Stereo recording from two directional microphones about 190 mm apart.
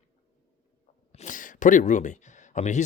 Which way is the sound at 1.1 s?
40° left (ahead or behind).